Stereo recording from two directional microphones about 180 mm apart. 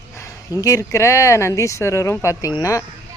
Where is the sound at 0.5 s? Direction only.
20° left (ahead or behind).